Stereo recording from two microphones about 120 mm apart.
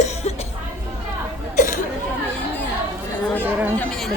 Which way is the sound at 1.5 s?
90° left.